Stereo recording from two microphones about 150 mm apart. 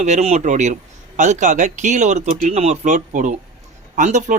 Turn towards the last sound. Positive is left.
turn(degrees=-55)  # may be behind; listen again after turning